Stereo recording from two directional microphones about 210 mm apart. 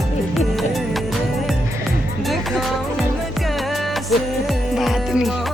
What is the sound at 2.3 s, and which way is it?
Music, centre (ahead or behind).